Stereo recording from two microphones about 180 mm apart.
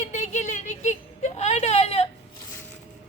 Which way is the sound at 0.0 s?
40° left (ahead or behind).